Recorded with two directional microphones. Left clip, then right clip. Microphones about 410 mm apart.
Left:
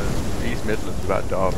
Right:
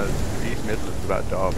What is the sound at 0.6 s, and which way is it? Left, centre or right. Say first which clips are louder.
Speech: left 3 dB; centre.